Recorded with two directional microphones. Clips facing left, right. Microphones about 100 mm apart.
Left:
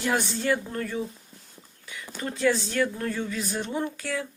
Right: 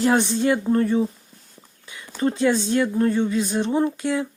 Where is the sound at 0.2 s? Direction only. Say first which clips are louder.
Right 6 dB; 20° right (ahead or behind).